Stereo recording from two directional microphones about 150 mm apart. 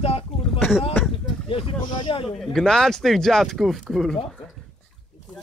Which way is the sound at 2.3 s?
5° left (ahead or behind).